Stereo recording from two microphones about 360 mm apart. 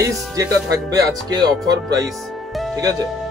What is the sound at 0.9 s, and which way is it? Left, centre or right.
Speech, centre.